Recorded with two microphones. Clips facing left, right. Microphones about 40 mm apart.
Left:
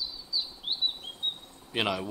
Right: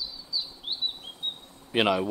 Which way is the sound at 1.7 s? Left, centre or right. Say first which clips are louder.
Right 6 dB; centre.